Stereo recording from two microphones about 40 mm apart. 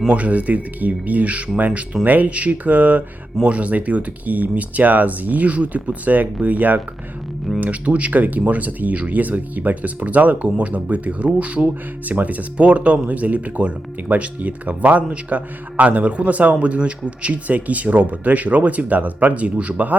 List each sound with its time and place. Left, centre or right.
0.1 s speech: right